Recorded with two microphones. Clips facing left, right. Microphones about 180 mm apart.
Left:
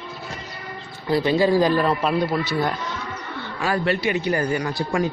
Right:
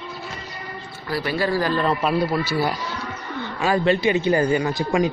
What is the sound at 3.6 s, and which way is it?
Speech, 20° right (ahead or behind).